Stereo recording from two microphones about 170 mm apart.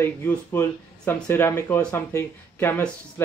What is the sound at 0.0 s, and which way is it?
Speech, 10° left (ahead or behind).